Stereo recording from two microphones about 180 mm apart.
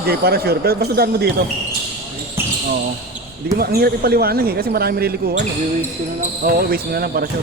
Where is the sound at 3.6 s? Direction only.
60° right (ahead or behind).